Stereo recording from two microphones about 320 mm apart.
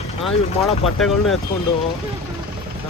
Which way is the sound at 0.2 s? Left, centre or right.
Centre.